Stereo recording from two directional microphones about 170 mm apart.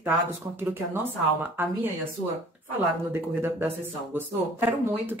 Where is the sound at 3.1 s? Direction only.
10° right (ahead or behind).